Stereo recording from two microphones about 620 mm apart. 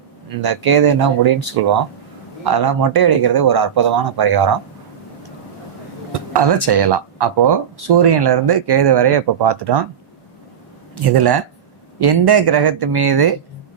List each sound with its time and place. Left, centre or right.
0.3 s speech: right
6.3 s speech: right
11.0 s speech: right